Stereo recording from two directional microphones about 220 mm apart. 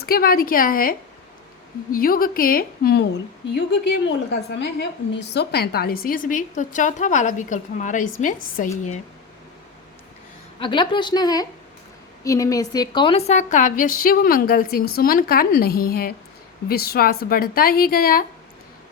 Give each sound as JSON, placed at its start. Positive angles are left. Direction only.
{"t": 0.0, "sound": "a woman's voice", "side_deg": 45}
{"t": 10.6, "sound": "a woman's voice", "side_deg": 20}